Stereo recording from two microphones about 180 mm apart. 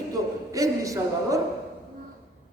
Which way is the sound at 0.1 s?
20° right (ahead or behind).